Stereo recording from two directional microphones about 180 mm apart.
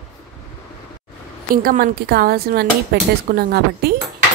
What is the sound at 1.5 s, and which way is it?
Speech, 50° right (ahead or behind).